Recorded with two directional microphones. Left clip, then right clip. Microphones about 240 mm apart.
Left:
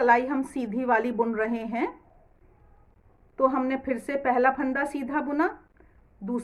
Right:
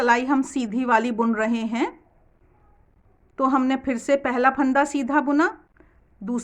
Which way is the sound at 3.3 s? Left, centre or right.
Right.